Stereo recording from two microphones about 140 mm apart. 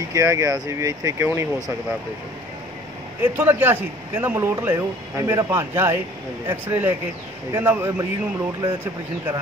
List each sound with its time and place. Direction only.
0.1 s speech: 25° right (ahead or behind)
3.2 s a man's voice: 15° right (ahead or behind)